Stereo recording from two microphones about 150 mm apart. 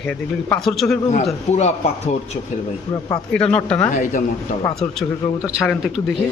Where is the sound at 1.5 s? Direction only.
45° left (ahead or behind).